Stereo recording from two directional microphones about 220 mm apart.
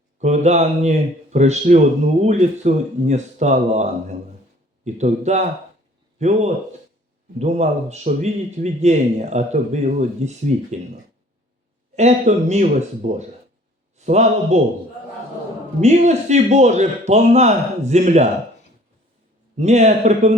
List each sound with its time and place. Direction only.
0.2 s a man's voice: 30° right (ahead or behind)
11.9 s a man's voice: 30° right (ahead or behind)
15.8 s a man's voice: 30° right (ahead or behind)
19.5 s a man's voice: 30° right (ahead or behind)